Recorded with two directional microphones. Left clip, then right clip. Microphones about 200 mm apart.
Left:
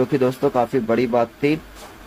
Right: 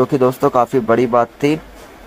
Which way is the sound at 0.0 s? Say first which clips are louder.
Right 5 dB; 15° right (ahead or behind).